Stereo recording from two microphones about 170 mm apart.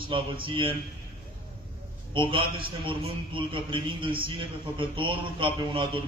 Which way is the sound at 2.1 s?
30° right (ahead or behind).